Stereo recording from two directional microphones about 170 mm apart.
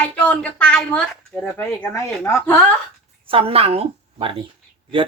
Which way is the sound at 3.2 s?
35° right (ahead or behind).